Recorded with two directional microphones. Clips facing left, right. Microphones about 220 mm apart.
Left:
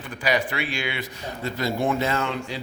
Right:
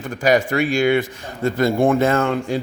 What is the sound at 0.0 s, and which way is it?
Speech, 45° right (ahead or behind).